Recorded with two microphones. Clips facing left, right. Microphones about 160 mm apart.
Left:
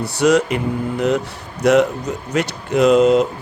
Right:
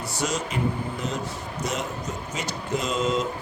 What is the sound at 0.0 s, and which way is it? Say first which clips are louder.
Speech: left 13 dB; 70° left (ahead or behind).